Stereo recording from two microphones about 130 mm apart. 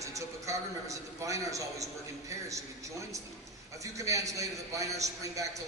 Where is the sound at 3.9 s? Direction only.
25° right (ahead or behind).